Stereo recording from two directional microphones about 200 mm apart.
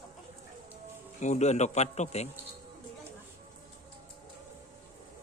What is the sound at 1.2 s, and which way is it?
A man's voice, 35° left (ahead or behind).